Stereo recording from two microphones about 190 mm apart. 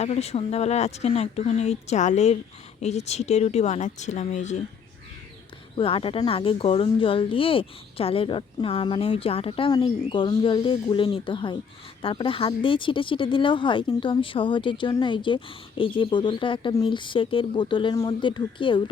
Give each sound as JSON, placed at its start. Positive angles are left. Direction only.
{"t": 0.0, "sound": "speech", "side_deg": 35}
{"t": 5.7, "sound": "speech", "side_deg": 30}